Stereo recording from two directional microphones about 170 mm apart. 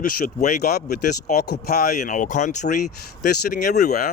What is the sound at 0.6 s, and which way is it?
Speech, 70° left (ahead or behind).